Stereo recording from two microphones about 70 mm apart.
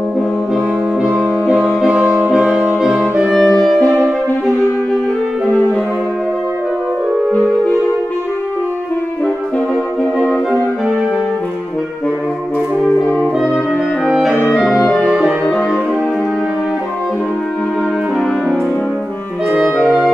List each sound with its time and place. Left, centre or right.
1.0 s brass instrument: centre
1.9 s music: centre
2.3 s brass instrument: centre
3.2 s music: centre
5.5 s music: left
14.0 s clarinet: centre
14.5 s music: centre
19.5 s music: centre